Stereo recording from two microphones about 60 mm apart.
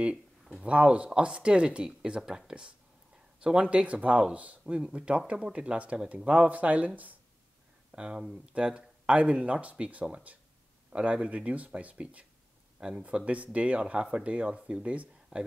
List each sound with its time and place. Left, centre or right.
0.0 s speech: centre
3.7 s speech: right
7.9 s speech: centre